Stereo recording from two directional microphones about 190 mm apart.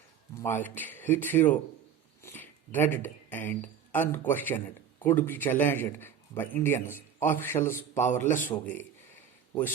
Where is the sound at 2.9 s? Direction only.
10° left (ahead or behind).